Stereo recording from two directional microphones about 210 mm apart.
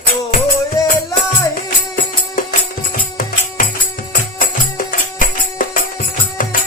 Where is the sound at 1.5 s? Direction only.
40° left (ahead or behind).